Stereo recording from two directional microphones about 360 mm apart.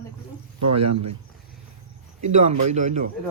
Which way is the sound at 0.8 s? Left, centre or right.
Right.